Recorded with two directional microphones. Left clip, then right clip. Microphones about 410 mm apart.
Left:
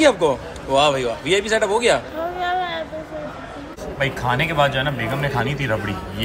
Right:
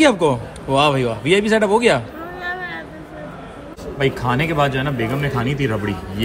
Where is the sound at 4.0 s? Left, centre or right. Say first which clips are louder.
Right 1 dB; centre.